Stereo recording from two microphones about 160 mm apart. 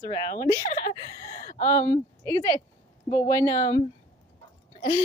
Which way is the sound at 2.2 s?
20° left (ahead or behind).